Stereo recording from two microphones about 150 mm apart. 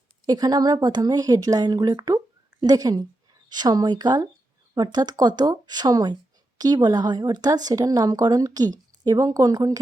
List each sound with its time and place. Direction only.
0.3 s speech: 25° right (ahead or behind)